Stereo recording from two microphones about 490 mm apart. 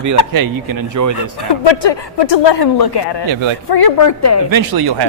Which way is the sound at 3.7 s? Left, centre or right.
Left.